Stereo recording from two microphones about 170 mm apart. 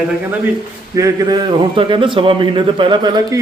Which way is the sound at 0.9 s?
20° right (ahead or behind).